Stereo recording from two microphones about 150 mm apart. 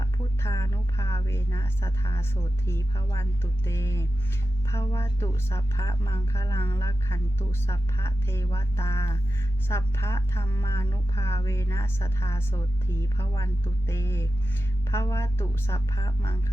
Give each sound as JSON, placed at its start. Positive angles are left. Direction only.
{"t": 0.0, "sound": "music", "side_deg": 20}
{"t": 4.7, "sound": "a woman's voice", "side_deg": 20}